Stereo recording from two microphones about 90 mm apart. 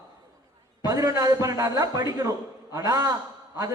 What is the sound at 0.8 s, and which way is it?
A man's voice, 40° right (ahead or behind).